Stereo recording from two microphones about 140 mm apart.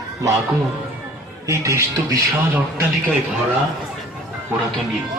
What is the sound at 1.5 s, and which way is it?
Speech, 20° right (ahead or behind).